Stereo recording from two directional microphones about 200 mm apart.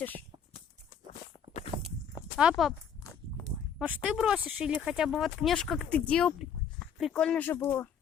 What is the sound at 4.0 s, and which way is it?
Speech, 5° right (ahead or behind).